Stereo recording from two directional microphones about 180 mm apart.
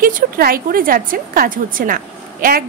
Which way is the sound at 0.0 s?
55° right (ahead or behind).